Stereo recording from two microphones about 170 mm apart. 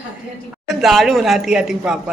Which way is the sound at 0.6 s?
Centre (ahead or behind).